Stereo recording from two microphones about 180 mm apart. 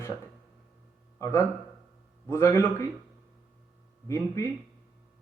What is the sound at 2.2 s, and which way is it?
Speech, 15° left (ahead or behind).